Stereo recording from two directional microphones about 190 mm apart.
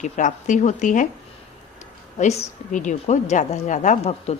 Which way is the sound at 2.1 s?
40° left (ahead or behind).